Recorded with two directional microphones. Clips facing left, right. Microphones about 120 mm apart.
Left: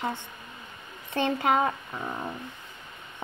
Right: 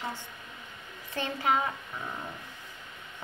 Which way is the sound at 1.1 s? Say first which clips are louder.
Left 4 dB; 60° left (ahead or behind).